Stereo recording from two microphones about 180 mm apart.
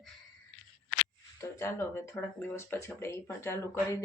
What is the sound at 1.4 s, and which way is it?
Speech, 15° left (ahead or behind).